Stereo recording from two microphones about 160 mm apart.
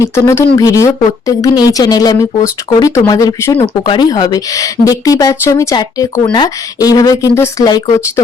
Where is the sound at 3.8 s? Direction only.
30° left (ahead or behind).